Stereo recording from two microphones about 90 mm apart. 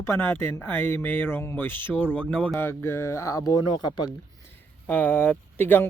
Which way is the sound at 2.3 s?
10° left (ahead or behind).